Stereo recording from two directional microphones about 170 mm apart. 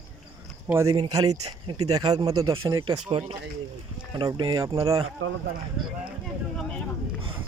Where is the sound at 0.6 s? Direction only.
15° right (ahead or behind).